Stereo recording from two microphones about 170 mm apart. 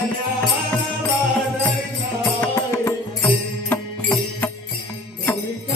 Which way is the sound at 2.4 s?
15° left (ahead or behind).